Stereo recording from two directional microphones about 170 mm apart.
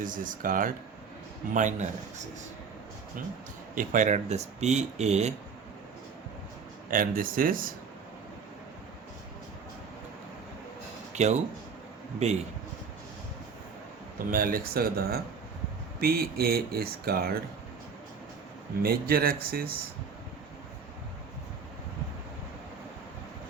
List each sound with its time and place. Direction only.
0.0 s speech: 50° right (ahead or behind)
3.8 s speech: 50° right (ahead or behind)
6.9 s speech: 55° right (ahead or behind)
11.1 s speech: 40° right (ahead or behind)
14.3 s speech: 55° right (ahead or behind)
18.8 s speech: 65° right (ahead or behind)